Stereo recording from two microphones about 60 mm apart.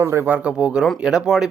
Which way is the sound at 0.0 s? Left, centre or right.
Right.